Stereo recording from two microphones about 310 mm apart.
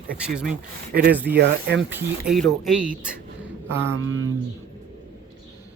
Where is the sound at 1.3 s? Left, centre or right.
Right.